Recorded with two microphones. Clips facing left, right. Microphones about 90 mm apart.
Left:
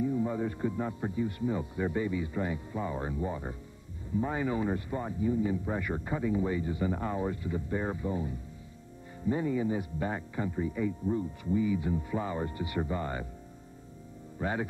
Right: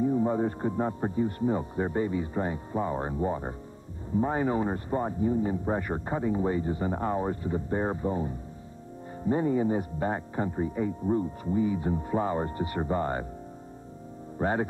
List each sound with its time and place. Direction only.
0.0 s speech: 40° right (ahead or behind)
14.4 s speech: 40° right (ahead or behind)